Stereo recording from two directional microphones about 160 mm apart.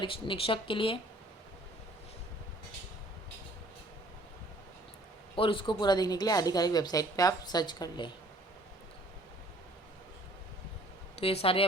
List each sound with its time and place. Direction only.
0.0 s speech: 35° left (ahead or behind)
5.4 s speech: 35° left (ahead or behind)
11.2 s speech: 40° left (ahead or behind)